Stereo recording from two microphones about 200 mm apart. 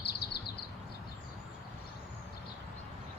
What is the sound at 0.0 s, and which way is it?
Bird, 55° left (ahead or behind).